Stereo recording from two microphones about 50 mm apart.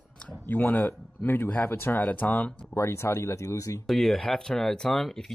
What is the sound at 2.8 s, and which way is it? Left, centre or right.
Speech, left.